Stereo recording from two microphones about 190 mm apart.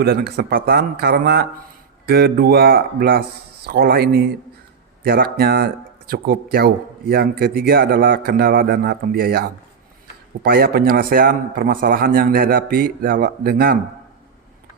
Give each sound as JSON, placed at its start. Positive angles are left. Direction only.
{"t": 0.0, "sound": "a man's voice", "side_deg": -55}